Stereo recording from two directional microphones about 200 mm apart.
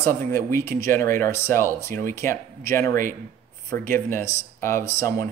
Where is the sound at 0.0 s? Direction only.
10° left (ahead or behind).